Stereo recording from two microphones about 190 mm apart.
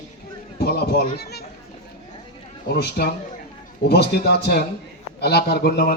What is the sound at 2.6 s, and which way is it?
A man's voice, 55° left (ahead or behind).